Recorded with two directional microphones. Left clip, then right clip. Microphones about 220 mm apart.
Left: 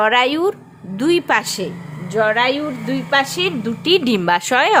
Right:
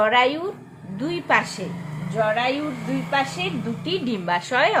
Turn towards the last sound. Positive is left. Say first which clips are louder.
# left 6 dB
turn(degrees=45)  # may be behind; listen again after turning